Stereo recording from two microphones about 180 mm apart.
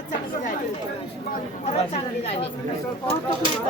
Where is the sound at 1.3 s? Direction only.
40° left (ahead or behind).